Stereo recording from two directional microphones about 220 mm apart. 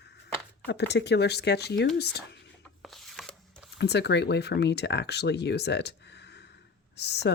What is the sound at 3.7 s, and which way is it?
Speech, 50° left (ahead or behind).